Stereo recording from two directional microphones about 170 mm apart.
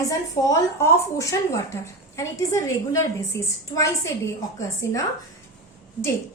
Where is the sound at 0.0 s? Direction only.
20° left (ahead or behind).